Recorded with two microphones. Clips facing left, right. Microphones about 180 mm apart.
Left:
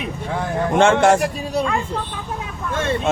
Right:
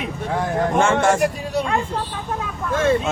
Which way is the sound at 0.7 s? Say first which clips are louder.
Left 5 dB; 75° left (ahead or behind).